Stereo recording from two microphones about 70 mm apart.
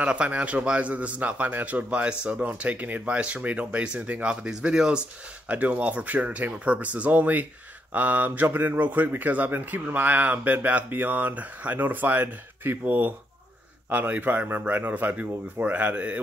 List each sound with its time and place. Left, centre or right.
0.0 s speech: centre